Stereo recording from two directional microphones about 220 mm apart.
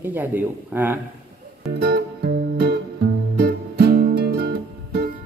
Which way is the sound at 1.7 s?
45° right (ahead or behind).